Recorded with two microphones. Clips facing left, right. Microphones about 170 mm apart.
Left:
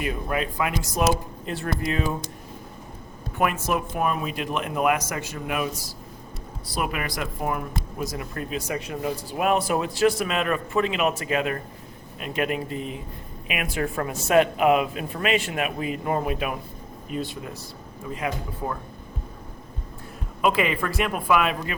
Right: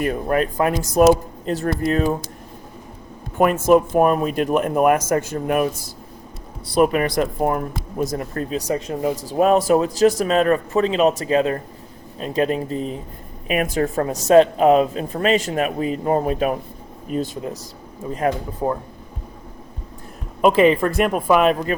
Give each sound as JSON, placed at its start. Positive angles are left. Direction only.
{"t": 0.0, "sound": "speech", "side_deg": -45}
{"t": 3.3, "sound": "speech", "side_deg": -45}
{"t": 6.7, "sound": "a woman's voice", "side_deg": -40}
{"t": 20.4, "sound": "a woman's voice", "side_deg": -40}